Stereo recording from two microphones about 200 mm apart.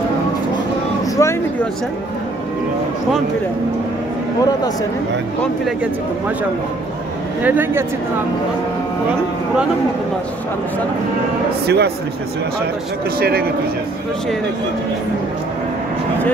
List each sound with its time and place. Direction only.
1.1 s vehicle: 15° left (ahead or behind)
7.4 s speech: 10° right (ahead or behind)
11.6 s speech: 55° right (ahead or behind)
13.2 s speech: 50° right (ahead or behind)